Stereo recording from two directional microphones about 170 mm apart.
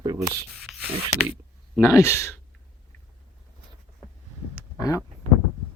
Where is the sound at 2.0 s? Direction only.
15° left (ahead or behind).